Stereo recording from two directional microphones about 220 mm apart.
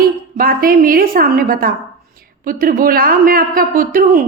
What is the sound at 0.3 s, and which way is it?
A woman's voice, 40° right (ahead or behind).